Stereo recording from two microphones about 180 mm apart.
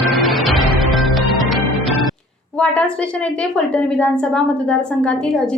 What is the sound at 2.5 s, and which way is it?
A woman's voice, 5° left (ahead or behind).